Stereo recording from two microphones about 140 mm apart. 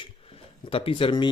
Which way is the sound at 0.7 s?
40° left (ahead or behind).